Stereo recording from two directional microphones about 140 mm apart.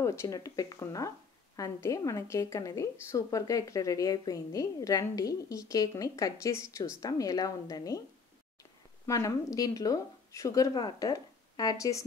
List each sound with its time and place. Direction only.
0.0 s a woman's voice: 20° left (ahead or behind)
9.0 s a woman's voice: 25° left (ahead or behind)